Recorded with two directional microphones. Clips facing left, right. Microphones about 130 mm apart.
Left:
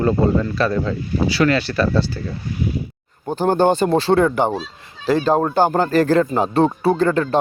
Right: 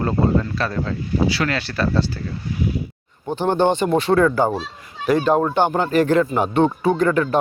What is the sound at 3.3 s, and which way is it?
Speech, 40° left (ahead or behind).